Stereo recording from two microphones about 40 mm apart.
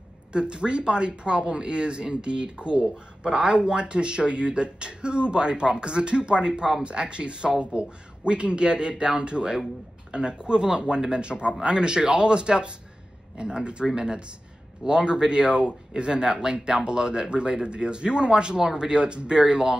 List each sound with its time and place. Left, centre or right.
0.3 s speech: right